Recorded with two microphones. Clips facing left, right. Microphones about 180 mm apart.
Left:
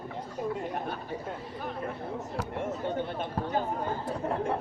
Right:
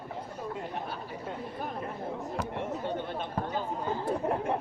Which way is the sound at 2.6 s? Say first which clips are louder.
Left 5 dB; 50° left (ahead or behind).